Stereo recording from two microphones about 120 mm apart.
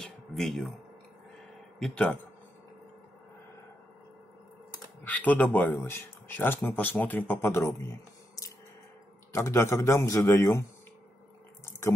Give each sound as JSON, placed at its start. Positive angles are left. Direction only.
{"t": 0.0, "sound": "a sound", "side_deg": 0}
{"t": 1.8, "sound": "speech", "side_deg": 10}
{"t": 5.0, "sound": "a man's voice", "side_deg": 10}